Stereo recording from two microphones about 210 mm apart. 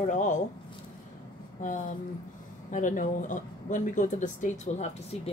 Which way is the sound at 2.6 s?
35° left (ahead or behind).